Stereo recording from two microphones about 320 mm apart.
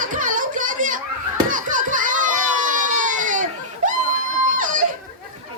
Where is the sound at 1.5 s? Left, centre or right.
Right.